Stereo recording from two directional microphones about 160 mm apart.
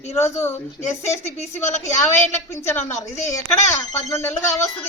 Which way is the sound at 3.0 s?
20° left (ahead or behind).